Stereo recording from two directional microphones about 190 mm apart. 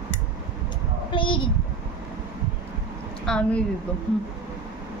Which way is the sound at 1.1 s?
25° left (ahead or behind).